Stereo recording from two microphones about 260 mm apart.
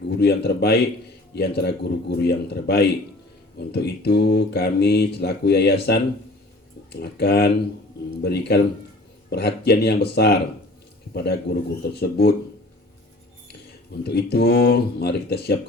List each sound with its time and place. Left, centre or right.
0.1 s speech: left
13.5 s speech: left